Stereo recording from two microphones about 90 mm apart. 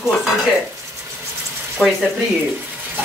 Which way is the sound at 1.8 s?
5° left (ahead or behind).